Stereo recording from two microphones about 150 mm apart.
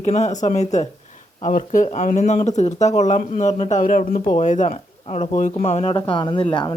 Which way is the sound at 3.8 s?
60° left (ahead or behind).